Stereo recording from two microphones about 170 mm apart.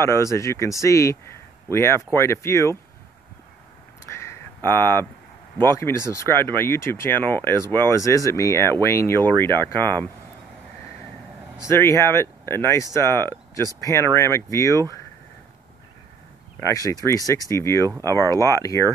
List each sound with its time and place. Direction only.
0.0 s speech: 15° left (ahead or behind)
4.1 s a sound: 15° left (ahead or behind)
4.6 s speech: 15° left (ahead or behind)
11.6 s speech: 15° left (ahead or behind)
16.5 s speech: 15° left (ahead or behind)